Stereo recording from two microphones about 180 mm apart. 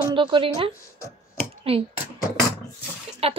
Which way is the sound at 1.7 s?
30° right (ahead or behind).